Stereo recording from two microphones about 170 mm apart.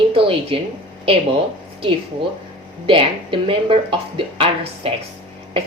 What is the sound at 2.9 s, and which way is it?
A woman's voice, 30° right (ahead or behind).